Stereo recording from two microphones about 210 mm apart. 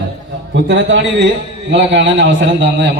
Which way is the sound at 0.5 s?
60° right (ahead or behind).